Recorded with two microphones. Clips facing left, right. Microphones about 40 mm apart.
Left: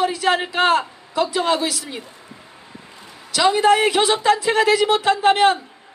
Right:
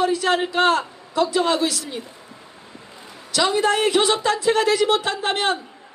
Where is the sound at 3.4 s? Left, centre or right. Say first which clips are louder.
Left 4 dB; left.